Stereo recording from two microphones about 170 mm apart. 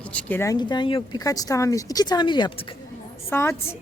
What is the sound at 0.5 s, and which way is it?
Speech, 25° left (ahead or behind).